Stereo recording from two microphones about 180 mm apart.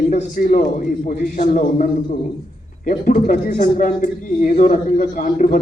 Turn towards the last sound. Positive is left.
turn(degrees=50)  # may be behind; listen again after turning